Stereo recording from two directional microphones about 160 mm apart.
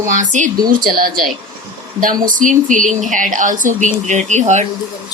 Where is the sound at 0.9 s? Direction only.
65° right (ahead or behind).